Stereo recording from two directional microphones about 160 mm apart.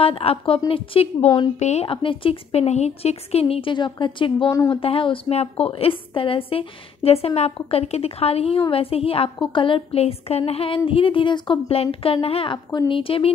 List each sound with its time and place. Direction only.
0.0 s a woman's voice: 35° left (ahead or behind)